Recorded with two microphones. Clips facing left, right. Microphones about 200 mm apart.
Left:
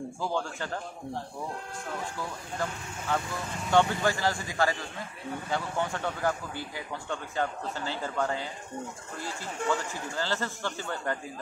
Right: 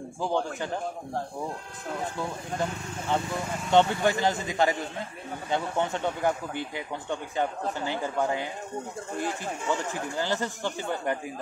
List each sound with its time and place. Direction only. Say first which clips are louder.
0.2 s speech: right 5 dB; 20° right (ahead or behind)
2.1 s speech: right 4 dB; 20° right (ahead or behind)